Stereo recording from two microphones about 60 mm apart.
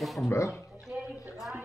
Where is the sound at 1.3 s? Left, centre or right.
Centre.